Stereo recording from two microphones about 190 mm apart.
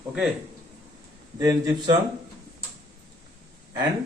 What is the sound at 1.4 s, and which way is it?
Speech, 15° right (ahead or behind).